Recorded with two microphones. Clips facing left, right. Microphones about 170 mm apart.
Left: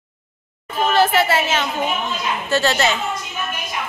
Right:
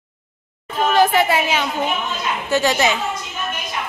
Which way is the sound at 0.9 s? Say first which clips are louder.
Right 1 dB; 15° right (ahead or behind).